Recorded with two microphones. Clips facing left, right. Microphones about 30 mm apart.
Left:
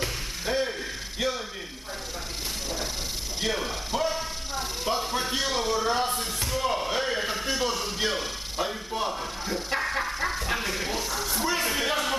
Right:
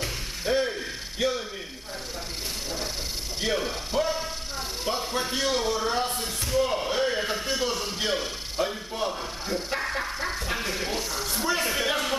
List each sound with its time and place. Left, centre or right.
0.0 s mechanisms: centre
1.2 s speech: centre
3.9 s speech: centre
4.8 s a sound: centre
10.8 s speech: centre